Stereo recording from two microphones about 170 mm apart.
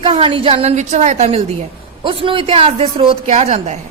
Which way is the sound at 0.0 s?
35° right (ahead or behind).